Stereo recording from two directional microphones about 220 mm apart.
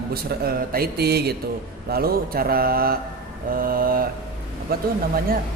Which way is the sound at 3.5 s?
40° right (ahead or behind).